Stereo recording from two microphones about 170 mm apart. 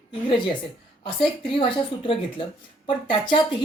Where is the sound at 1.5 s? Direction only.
30° left (ahead or behind).